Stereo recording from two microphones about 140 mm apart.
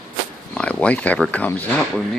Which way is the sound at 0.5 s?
10° left (ahead or behind).